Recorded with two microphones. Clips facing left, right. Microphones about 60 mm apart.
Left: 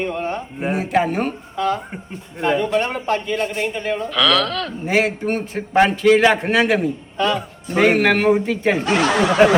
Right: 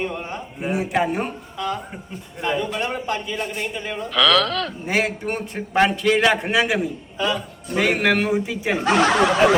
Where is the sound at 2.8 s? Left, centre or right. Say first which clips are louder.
Left 4 dB; left.